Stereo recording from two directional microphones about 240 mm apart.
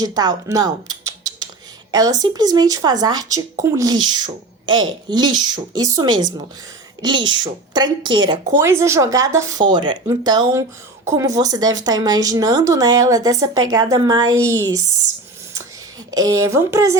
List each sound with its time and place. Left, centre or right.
0.0 s speech: centre
16.1 s speech: centre